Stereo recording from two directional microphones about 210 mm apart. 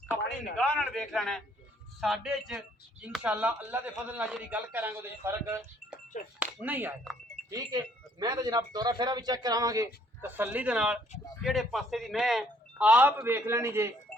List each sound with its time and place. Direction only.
0.5 s a man's voice: centre (ahead or behind)
7.5 s a man's voice: 20° right (ahead or behind)